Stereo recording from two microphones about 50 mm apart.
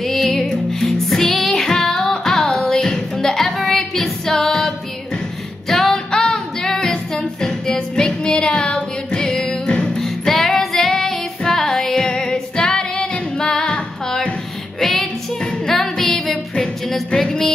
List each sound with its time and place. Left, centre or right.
0.0 s music: centre
9.3 s music: centre
9.7 s music: centre
10.0 s music: centre
10.6 s female singing: centre
15.6 s music: centre